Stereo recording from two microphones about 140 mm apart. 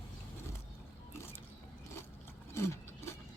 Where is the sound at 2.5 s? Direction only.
20° left (ahead or behind).